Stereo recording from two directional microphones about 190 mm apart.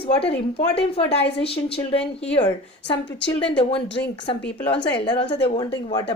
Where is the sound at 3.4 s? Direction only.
25° left (ahead or behind).